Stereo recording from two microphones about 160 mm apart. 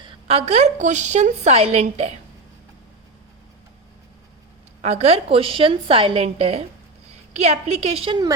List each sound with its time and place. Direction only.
0.0 s a woman's voice: 40° right (ahead or behind)
4.8 s a woman's voice: 45° right (ahead or behind)